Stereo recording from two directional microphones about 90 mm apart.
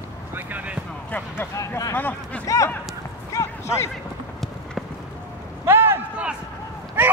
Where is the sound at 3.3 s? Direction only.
35° left (ahead or behind).